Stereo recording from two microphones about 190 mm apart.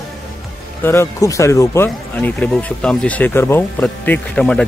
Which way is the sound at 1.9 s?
5° left (ahead or behind).